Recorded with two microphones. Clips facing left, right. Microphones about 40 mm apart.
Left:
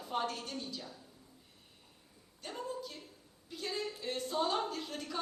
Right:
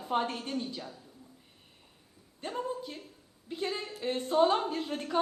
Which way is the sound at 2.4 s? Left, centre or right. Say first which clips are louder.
Right 6 dB; right.